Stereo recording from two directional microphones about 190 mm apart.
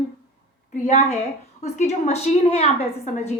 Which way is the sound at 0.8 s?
40° left (ahead or behind).